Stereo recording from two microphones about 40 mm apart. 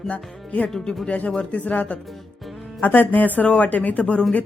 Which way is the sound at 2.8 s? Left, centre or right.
Left.